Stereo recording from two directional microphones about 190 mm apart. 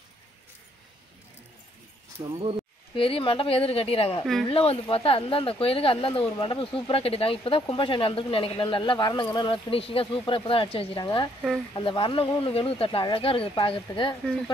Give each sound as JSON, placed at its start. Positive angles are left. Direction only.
{"t": 2.1, "sound": "speech", "side_deg": -30}
{"t": 3.0, "sound": "speech", "side_deg": 30}